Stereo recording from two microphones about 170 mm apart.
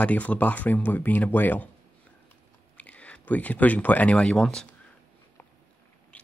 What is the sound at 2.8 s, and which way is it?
Speech, 10° left (ahead or behind).